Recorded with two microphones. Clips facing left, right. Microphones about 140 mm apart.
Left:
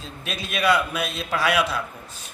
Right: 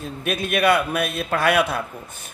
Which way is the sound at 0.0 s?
55° right (ahead or behind).